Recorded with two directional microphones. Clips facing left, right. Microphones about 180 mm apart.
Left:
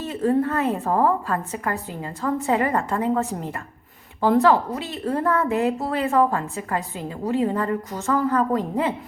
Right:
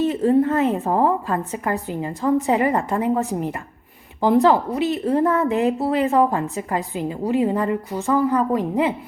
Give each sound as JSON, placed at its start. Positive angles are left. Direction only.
{"t": 0.0, "sound": "a woman's voice", "side_deg": -20}